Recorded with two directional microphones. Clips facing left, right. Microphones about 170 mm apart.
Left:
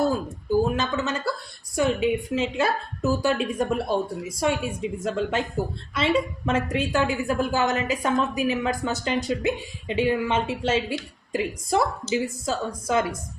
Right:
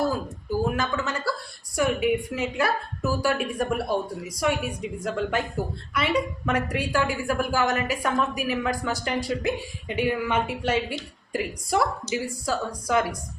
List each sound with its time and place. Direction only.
0.8 s a woman's voice: 20° left (ahead or behind)